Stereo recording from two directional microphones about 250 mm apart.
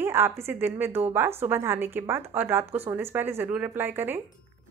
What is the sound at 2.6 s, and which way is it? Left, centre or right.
Speech, right.